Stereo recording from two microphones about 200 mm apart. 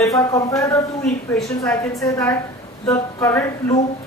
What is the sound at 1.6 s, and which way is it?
Speech, 15° left (ahead or behind).